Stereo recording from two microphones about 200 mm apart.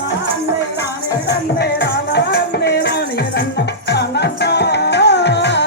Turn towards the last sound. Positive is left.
turn(degrees=60)  # may be behind; listen again after turning